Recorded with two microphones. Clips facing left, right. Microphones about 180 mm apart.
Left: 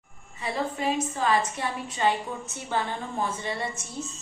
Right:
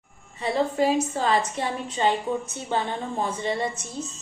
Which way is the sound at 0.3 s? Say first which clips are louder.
Right 7 dB; 35° right (ahead or behind).